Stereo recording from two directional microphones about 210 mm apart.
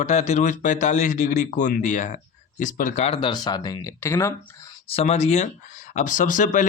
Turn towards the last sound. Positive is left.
turn(degrees=40)  # may be behind; listen again after turning